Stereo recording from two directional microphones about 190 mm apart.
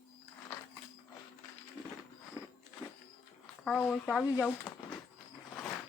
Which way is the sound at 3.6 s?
5° left (ahead or behind).